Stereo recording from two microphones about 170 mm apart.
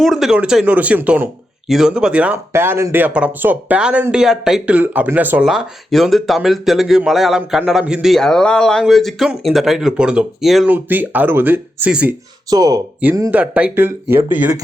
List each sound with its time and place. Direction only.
0.0 s speech: centre (ahead or behind)
12.5 s speech: 20° right (ahead or behind)
13.0 s speech: 10° right (ahead or behind)